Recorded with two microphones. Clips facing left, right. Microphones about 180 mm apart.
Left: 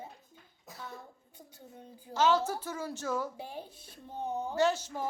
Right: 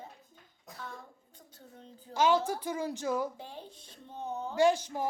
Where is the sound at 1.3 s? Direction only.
10° left (ahead or behind).